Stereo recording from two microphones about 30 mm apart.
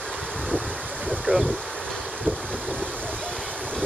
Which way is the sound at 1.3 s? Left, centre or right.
Right.